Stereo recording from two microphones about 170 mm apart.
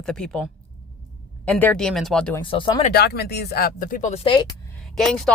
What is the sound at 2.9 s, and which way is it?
Speech, 70° left (ahead or behind).